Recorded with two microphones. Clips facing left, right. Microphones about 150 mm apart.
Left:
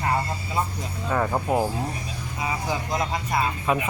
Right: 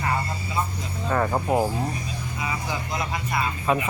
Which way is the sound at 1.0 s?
Centre (ahead or behind).